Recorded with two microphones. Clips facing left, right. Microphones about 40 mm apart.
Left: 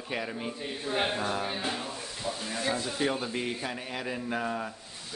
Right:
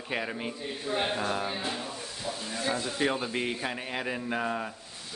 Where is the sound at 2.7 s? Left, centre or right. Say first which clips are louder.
Right 2 dB; right.